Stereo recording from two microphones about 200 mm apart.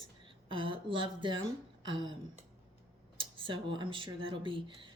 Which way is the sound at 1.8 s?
25° right (ahead or behind).